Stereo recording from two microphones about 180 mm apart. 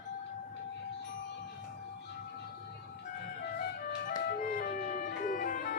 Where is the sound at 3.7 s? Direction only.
50° left (ahead or behind).